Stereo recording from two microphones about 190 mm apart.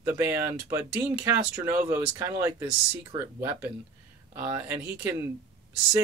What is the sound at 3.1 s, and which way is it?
Speech, 25° right (ahead or behind).